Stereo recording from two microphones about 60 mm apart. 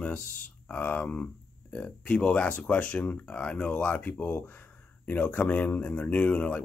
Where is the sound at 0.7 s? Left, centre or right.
Left.